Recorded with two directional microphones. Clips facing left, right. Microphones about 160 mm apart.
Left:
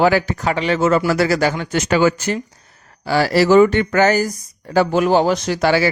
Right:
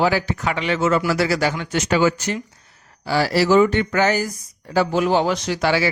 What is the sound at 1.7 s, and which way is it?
Speech, 55° left (ahead or behind).